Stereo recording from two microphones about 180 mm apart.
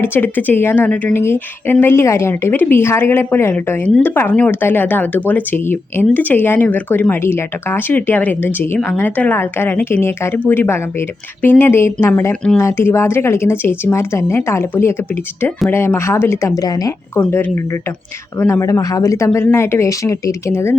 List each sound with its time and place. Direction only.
0.0 s speech: 10° left (ahead or behind)
17.2 s speech: 10° left (ahead or behind)